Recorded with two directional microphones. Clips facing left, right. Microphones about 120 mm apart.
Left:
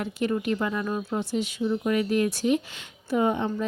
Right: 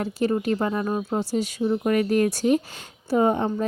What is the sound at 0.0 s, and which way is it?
Speech, 35° right (ahead or behind).